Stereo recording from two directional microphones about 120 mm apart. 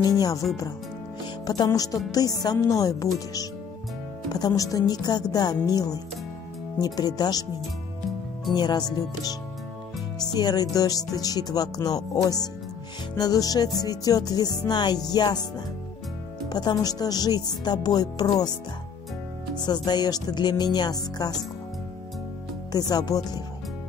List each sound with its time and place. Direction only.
0.0 s speech: 30° left (ahead or behind)
4.3 s speech: 35° left (ahead or behind)
8.5 s speech: 35° left (ahead or behind)
22.7 s speech: 35° left (ahead or behind)